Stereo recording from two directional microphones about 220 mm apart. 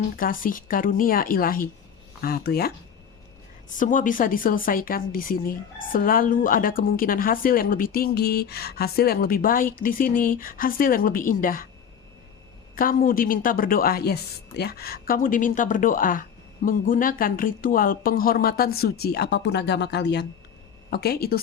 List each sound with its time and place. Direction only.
0.2 s a woman's voice: 40° left (ahead or behind)
3.8 s a woman's voice: 35° left (ahead or behind)
12.7 s a woman's voice: 40° left (ahead or behind)